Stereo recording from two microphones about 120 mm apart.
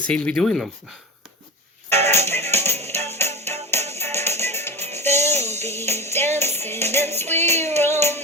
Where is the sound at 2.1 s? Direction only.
20° left (ahead or behind).